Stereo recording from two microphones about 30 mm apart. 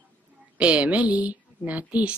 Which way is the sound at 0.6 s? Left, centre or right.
Right.